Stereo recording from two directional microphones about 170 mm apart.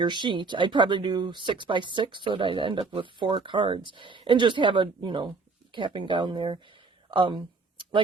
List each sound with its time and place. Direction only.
0.0 s speech: 25° right (ahead or behind)